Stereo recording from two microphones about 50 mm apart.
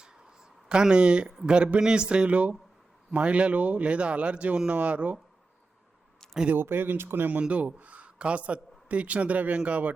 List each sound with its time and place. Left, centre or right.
0.0 s a sound: centre
1.5 s speech: right
6.5 s speech: right
7.4 s a man's voice: right